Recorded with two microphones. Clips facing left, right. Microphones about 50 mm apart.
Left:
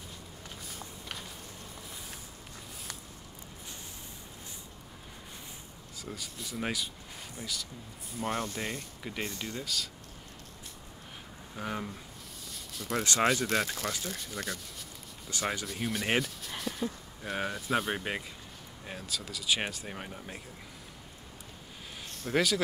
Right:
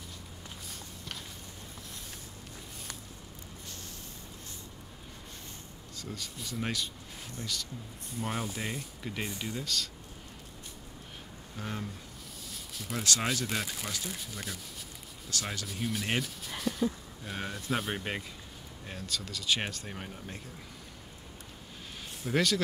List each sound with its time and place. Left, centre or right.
5.9 s speech: centre
9.3 s speech: centre
9.6 s speech: centre
11.5 s speech: centre
12.4 s a sound: centre
13.5 s speech: centre
15.3 s speech: centre
15.6 s speech: centre
22.3 s speech: centre